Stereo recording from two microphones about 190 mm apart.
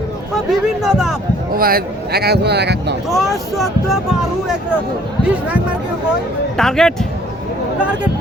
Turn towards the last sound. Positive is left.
turn(degrees=5)  # may be behind; listen again after turning